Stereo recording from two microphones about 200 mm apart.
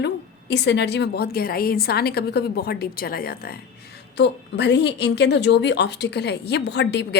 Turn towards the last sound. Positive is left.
turn(degrees=55)  # may be behind; listen again after turning